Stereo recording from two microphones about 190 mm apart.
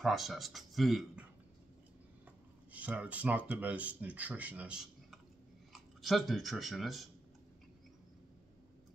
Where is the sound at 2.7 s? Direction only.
5° right (ahead or behind).